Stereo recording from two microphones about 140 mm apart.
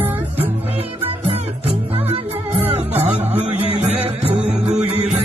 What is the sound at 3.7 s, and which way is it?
Music, 45° right (ahead or behind).